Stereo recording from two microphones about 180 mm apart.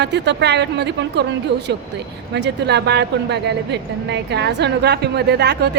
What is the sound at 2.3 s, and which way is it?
A woman's voice, 70° right (ahead or behind).